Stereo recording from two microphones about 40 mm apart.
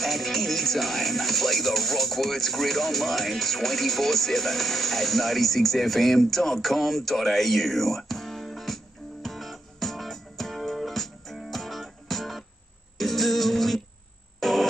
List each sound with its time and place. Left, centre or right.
0.0 s music: centre